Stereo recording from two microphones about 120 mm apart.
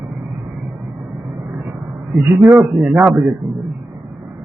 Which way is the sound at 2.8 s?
10° right (ahead or behind).